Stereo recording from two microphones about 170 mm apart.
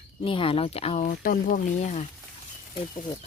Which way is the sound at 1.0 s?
55° left (ahead or behind).